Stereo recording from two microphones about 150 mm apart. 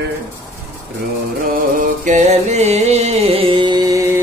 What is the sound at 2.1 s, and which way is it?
Music, 50° right (ahead or behind).